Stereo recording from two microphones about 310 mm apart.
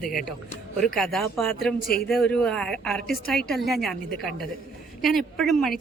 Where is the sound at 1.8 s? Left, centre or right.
Left.